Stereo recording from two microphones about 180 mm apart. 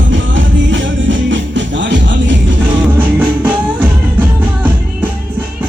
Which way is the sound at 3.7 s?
10° right (ahead or behind).